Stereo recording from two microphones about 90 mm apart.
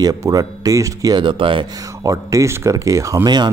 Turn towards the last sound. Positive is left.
turn(degrees=-55)  # may be behind; listen again after turning